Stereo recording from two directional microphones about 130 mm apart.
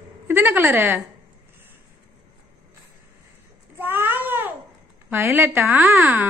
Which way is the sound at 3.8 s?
15° right (ahead or behind).